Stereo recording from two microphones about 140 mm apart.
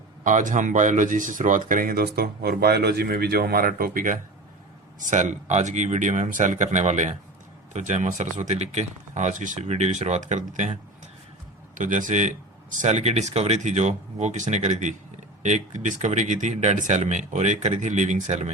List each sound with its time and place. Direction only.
0.3 s speech: 65° right (ahead or behind)
4.9 s speech: 65° right (ahead or behind)
11.8 s speech: 65° right (ahead or behind)
12.8 s speech: 50° right (ahead or behind)